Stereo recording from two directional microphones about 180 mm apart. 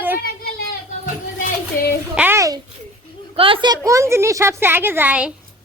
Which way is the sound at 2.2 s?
15° right (ahead or behind).